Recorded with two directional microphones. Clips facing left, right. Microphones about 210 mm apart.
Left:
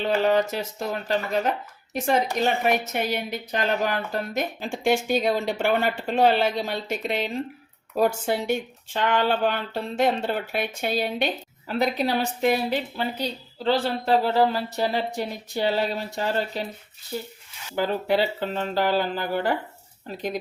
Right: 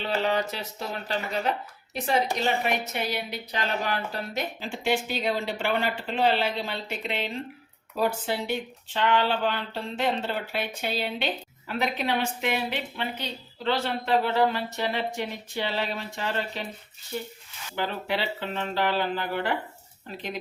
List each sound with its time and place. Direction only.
0.0 s a woman's voice: 50° left (ahead or behind)
17.7 s a woman's voice: 40° left (ahead or behind)